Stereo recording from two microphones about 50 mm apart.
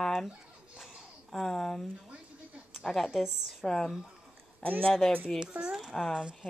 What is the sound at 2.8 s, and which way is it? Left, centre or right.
Speech, centre.